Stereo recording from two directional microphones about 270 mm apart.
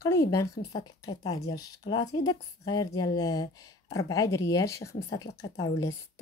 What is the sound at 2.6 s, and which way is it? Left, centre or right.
Speech, centre.